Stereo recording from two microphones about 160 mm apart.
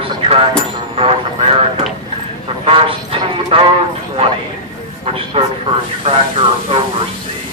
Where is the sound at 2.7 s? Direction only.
35° right (ahead or behind).